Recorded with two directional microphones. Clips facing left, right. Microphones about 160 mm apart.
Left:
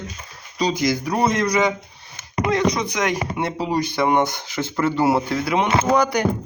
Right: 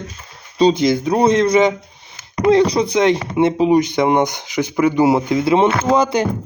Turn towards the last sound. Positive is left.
turn(degrees=-25)  # may be behind; listen again after turning